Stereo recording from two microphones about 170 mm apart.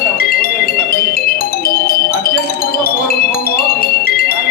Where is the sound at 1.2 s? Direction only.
60° left (ahead or behind).